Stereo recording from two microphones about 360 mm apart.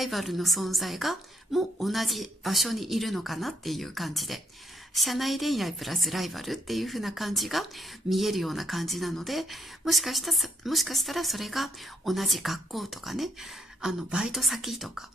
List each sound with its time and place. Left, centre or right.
0.0 s speech: centre